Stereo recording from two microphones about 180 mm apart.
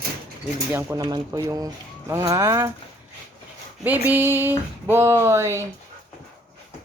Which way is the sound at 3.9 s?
10° right (ahead or behind).